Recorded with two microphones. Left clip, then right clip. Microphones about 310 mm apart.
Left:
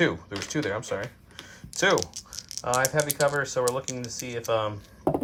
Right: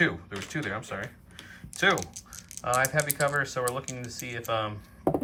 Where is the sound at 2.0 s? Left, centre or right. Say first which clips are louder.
Left 6 dB; centre.